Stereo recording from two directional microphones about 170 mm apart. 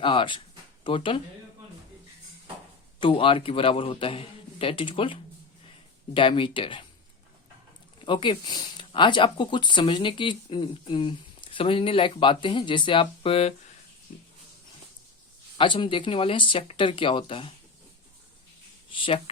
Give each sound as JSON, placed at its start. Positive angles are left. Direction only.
{"t": 0.0, "sound": "speech", "side_deg": 30}
{"t": 3.0, "sound": "a man's voice", "side_deg": 30}
{"t": 6.1, "sound": "a man's voice", "side_deg": 30}
{"t": 8.0, "sound": "speech", "side_deg": 30}
{"t": 14.1, "sound": "a sound", "side_deg": 50}
{"t": 15.5, "sound": "a man's voice", "side_deg": 30}
{"t": 18.9, "sound": "speech", "side_deg": 30}